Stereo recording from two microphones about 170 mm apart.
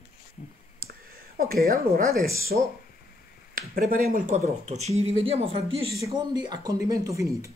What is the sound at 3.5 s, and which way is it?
Speech, 55° right (ahead or behind).